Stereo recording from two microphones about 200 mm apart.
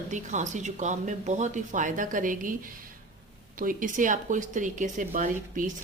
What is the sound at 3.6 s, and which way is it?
A woman's voice, 40° right (ahead or behind).